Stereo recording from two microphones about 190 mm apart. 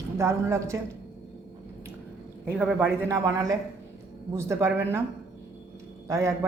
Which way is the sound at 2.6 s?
5° right (ahead or behind).